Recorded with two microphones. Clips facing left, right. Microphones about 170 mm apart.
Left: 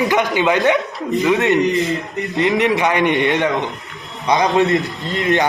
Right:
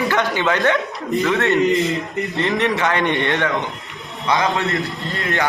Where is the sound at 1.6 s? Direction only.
Centre (ahead or behind).